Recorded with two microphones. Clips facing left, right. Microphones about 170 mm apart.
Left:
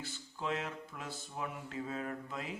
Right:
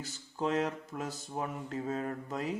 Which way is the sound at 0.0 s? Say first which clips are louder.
Right 6 dB; 40° right (ahead or behind).